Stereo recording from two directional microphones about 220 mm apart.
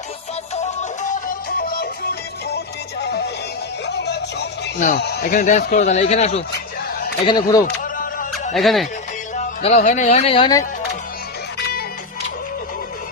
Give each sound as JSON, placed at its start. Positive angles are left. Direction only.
{"t": 0.5, "sound": "music", "side_deg": 30}
{"t": 3.8, "sound": "a sound", "side_deg": 50}
{"t": 4.9, "sound": "a man's voice", "side_deg": 45}
{"t": 7.3, "sound": "speech", "side_deg": 20}
{"t": 8.5, "sound": "speech", "side_deg": 0}
{"t": 9.3, "sound": "speech", "side_deg": 30}